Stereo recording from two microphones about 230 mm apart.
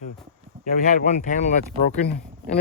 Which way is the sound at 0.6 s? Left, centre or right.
Left.